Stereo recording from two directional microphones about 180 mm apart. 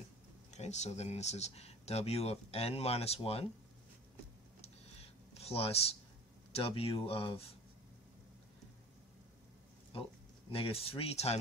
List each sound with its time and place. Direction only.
0.5 s speech: 40° left (ahead or behind)
5.3 s speech: 35° left (ahead or behind)
9.9 s speech: 30° left (ahead or behind)